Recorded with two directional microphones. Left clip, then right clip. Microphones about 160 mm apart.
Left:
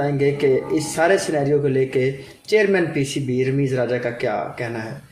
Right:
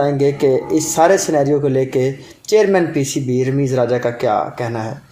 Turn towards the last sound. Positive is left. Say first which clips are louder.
# right 6 dB
turn(degrees=-30)  # may be behind; listen again after turning